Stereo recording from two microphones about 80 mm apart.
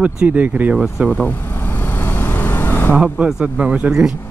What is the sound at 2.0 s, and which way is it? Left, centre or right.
Vehicle, left.